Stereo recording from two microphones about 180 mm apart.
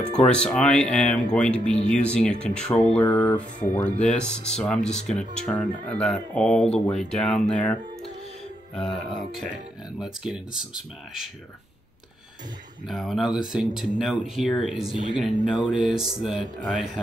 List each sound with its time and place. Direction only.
0.1 s speech: 5° left (ahead or behind)
3.0 s speech: 20° left (ahead or behind)
4.0 s speech: 5° left (ahead or behind)
12.8 s speech: centre (ahead or behind)